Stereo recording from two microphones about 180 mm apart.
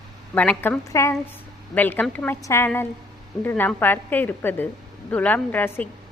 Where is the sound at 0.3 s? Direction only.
5° left (ahead or behind).